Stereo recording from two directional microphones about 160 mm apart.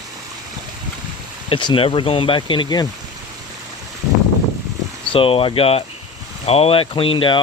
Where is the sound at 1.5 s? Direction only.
30° left (ahead or behind).